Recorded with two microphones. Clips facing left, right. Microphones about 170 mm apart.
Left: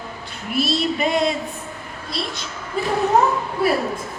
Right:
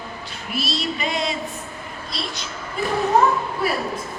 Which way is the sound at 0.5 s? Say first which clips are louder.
Left 5 dB; 55° left (ahead or behind).